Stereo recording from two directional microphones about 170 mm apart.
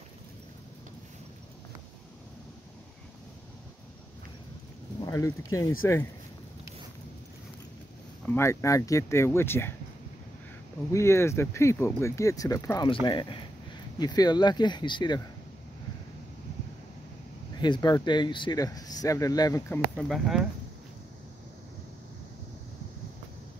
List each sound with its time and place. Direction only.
5.0 s speech: 20° left (ahead or behind)
8.3 s speech: 15° left (ahead or behind)
10.9 s speech: 15° left (ahead or behind)
17.6 s speech: 25° left (ahead or behind)
19.7 s speech: 5° left (ahead or behind)